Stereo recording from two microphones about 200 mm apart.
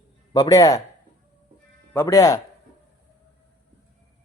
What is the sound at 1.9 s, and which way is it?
Speech, 15° left (ahead or behind).